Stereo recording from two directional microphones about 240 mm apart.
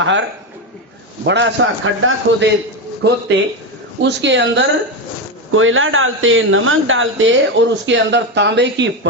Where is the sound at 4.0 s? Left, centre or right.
Right.